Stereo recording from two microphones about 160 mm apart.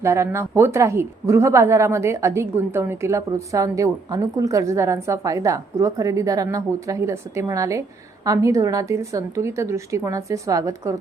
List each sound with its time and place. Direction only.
0.0 s speech: 15° right (ahead or behind)